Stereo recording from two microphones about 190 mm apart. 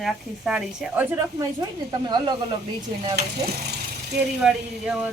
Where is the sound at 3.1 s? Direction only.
60° right (ahead or behind).